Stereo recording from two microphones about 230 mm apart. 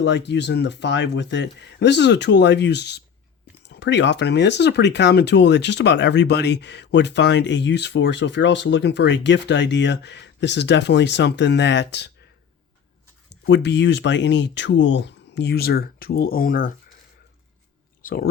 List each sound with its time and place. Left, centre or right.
0.0 s speech: left
13.3 s speech: left
18.0 s speech: left